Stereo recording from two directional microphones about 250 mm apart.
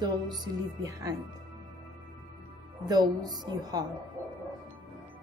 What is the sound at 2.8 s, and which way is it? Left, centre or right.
A woman's voice, centre.